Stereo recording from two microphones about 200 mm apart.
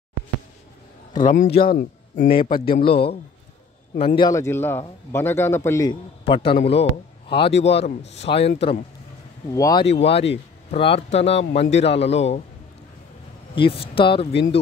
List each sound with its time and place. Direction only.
1.1 s a man's voice: 40° left (ahead or behind)
2.6 s a man's voice: 25° left (ahead or behind)
6.2 s a man's voice: 25° left (ahead or behind)
9.5 s a man's voice: 15° left (ahead or behind)
9.8 s speech: 30° left (ahead or behind)
13.6 s speech: 25° left (ahead or behind)